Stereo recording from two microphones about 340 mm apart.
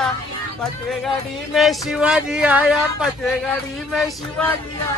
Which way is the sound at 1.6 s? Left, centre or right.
Centre.